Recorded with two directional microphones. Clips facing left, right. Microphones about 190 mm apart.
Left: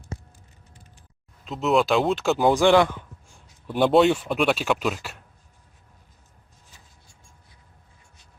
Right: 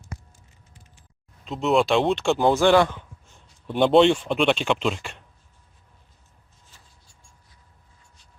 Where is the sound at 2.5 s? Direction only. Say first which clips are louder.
Even; 15° left (ahead or behind).